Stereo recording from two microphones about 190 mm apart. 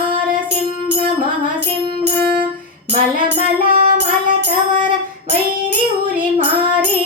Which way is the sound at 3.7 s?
45° right (ahead or behind).